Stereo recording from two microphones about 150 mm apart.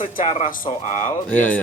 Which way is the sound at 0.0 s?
55° left (ahead or behind).